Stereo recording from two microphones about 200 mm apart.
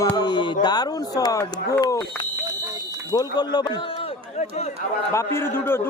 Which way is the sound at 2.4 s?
20° right (ahead or behind).